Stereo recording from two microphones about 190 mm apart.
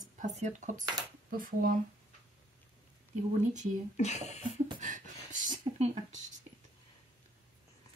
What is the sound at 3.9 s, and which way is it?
Speech, 35° left (ahead or behind).